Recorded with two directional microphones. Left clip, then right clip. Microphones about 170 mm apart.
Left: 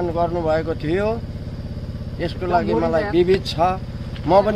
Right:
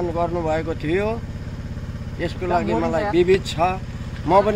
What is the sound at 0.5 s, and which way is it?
Speech, 30° left (ahead or behind).